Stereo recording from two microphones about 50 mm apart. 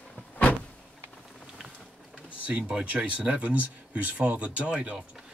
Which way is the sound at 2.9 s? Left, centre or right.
Right.